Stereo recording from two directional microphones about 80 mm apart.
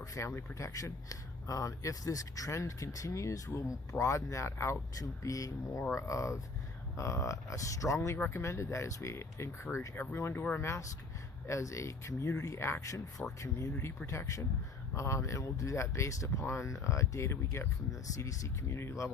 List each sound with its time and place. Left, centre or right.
0.0 s speech: left
9.9 s speech: left